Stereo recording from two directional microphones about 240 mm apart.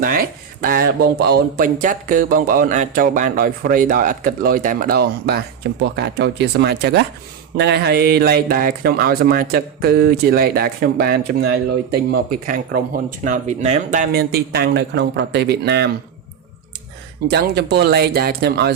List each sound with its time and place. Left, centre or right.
0.0 s speech: right
17.2 s speech: right